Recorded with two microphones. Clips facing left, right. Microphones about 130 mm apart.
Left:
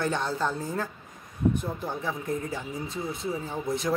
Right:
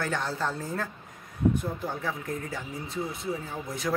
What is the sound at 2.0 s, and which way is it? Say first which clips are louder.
A man's voice: left 2 dB; 20° left (ahead or behind).